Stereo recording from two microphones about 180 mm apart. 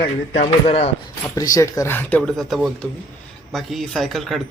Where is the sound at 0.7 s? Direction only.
35° left (ahead or behind).